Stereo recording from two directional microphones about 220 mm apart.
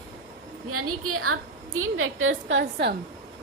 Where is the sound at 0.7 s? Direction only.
80° right; by 2.9 s 50° right (ahead or behind).